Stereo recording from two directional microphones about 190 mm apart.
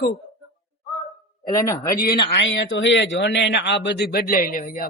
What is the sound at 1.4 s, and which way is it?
Speech, 15° left (ahead or behind).